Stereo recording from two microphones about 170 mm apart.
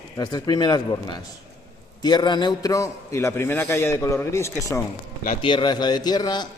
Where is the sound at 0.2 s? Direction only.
25° left (ahead or behind).